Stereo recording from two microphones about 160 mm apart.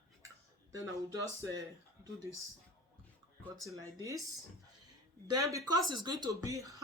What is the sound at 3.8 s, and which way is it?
Speech, 20° right (ahead or behind).